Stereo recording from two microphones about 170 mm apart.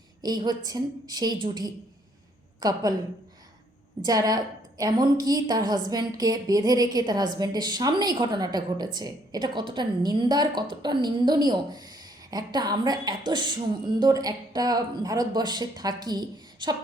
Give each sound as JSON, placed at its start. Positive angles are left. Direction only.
{"t": 0.2, "sound": "a woman's voice", "side_deg": -25}
{"t": 4.0, "sound": "a woman's voice", "side_deg": -20}